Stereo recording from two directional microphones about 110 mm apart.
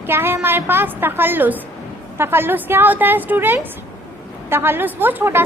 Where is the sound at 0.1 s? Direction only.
20° right (ahead or behind).